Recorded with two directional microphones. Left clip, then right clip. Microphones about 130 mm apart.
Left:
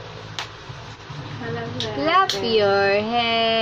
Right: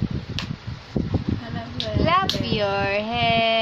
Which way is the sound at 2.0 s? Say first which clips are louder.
Left 3 dB; 10° right (ahead or behind).